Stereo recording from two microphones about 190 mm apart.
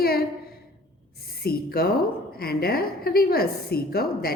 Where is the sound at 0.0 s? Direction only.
55° left (ahead or behind).